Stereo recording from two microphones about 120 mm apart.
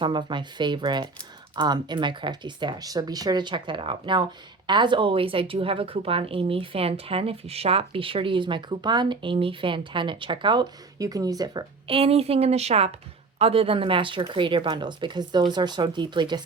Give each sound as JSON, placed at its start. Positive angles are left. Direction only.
{"t": 0.0, "sound": "speech", "side_deg": -40}
{"t": 11.9, "sound": "a woman's voice", "side_deg": -55}